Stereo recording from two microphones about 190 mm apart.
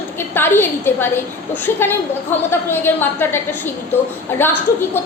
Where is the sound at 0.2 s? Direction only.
10° left (ahead or behind).